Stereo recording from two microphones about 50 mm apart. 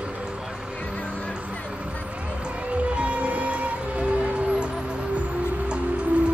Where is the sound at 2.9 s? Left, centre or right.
Right.